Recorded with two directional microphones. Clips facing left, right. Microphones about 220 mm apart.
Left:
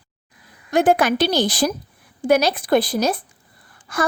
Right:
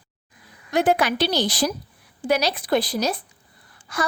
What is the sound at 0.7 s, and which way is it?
A woman's voice, 50° left (ahead or behind).